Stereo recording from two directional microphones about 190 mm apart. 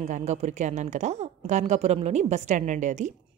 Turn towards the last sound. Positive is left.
turn(degrees=-40)  # may be behind; listen again after turning